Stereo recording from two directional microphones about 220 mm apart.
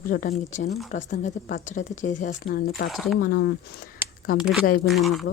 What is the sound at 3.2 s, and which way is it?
Speech, 45° left (ahead or behind).